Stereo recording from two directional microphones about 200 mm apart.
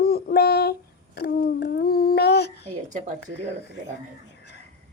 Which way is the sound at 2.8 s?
40° right (ahead or behind).